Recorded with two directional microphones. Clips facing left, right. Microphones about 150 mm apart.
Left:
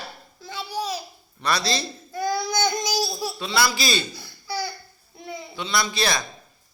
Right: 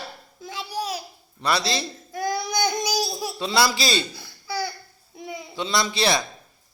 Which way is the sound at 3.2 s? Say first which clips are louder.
Right 5 dB; 25° right (ahead or behind).